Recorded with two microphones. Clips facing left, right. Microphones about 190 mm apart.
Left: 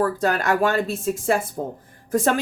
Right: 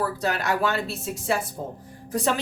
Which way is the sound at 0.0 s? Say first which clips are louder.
Left 5 dB; 50° left (ahead or behind).